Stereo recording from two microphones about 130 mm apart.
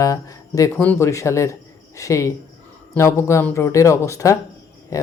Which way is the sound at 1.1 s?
25° left (ahead or behind).